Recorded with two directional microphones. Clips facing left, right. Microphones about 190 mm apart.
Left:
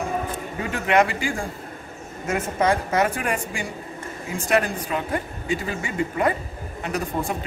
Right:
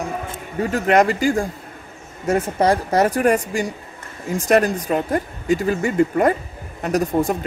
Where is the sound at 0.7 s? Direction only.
40° right (ahead or behind).